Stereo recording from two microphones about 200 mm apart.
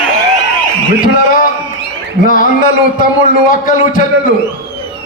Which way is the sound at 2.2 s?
45° left (ahead or behind).